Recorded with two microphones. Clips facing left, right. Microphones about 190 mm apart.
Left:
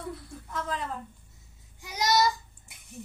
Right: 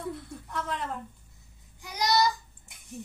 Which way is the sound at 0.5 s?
Centre (ahead or behind).